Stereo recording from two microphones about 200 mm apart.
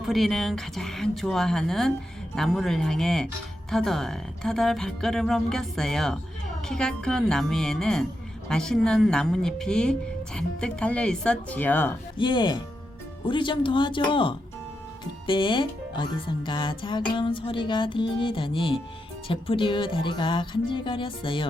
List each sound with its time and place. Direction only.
0.0 s speech: centre (ahead or behind)
12.1 s speech: 25° left (ahead or behind)